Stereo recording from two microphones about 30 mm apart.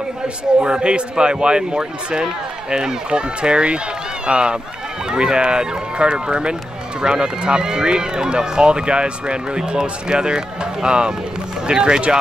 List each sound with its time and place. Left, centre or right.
0.6 s speech: right